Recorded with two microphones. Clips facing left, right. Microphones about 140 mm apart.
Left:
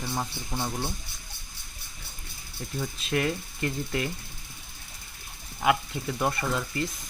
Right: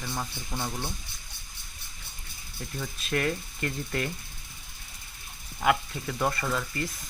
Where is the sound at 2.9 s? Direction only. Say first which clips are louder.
Even; 20° left (ahead or behind).